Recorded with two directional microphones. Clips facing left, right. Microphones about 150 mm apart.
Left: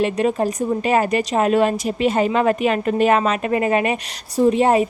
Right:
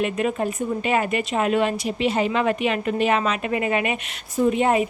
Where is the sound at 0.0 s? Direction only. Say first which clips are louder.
Left 4 dB; 35° left (ahead or behind).